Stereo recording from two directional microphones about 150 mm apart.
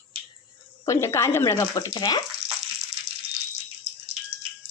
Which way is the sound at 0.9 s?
20° left (ahead or behind).